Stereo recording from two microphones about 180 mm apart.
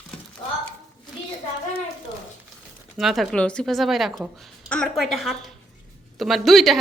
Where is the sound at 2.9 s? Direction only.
Centre (ahead or behind).